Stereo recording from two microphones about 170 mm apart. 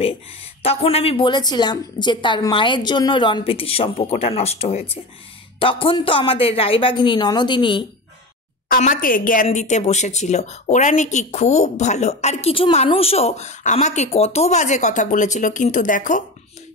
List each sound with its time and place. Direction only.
0.6 s speech: 35° left (ahead or behind)
8.6 s speech: 55° left (ahead or behind)